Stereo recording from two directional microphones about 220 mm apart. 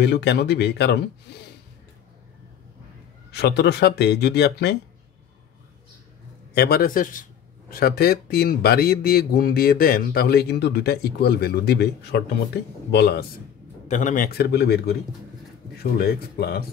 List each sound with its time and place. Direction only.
0.0 s a man's voice: 50° left (ahead or behind)
3.3 s a man's voice: 50° left (ahead or behind)
6.5 s a man's voice: 45° left (ahead or behind)
13.8 s a man's voice: 35° left (ahead or behind)